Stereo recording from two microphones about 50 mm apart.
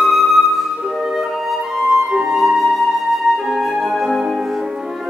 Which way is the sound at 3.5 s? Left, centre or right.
Centre.